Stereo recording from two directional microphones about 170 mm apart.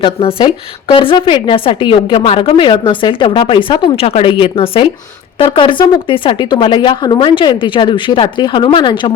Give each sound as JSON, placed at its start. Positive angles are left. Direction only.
{"t": 0.0, "sound": "a woman's voice", "side_deg": 30}